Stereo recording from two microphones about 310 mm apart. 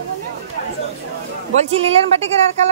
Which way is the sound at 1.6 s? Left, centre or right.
Centre.